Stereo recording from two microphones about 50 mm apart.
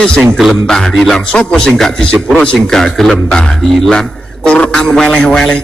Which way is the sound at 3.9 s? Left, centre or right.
Centre.